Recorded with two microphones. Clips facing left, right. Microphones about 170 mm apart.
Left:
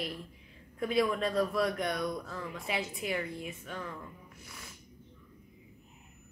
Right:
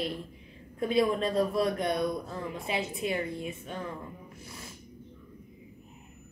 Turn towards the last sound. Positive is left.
turn(degrees=-25)  # may be behind; listen again after turning